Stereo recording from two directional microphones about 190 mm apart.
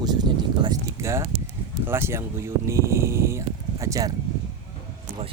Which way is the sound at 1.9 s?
15° right (ahead or behind).